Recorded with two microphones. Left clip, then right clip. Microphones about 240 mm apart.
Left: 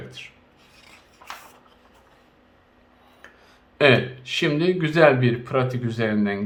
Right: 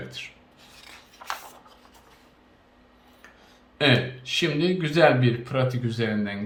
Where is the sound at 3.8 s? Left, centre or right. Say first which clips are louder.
Left 5 dB; centre.